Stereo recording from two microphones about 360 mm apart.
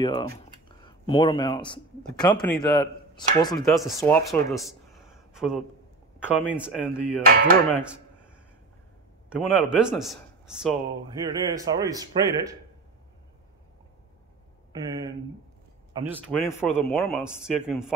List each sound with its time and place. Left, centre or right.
0.7 s a man's voice: centre
7.2 s a sound: right
9.3 s a man's voice: centre
14.7 s a man's voice: centre
16.1 s a man's voice: centre